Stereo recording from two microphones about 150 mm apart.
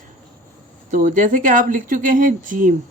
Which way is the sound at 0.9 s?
60° right (ahead or behind).